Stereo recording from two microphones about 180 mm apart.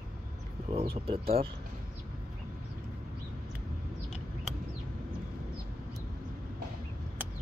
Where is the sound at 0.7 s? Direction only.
30° right (ahead or behind).